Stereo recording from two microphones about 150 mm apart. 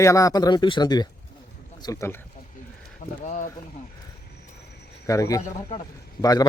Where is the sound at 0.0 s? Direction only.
20° left (ahead or behind).